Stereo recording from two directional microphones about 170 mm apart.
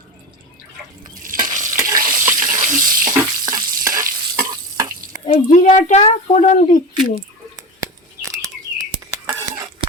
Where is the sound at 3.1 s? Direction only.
20° right (ahead or behind).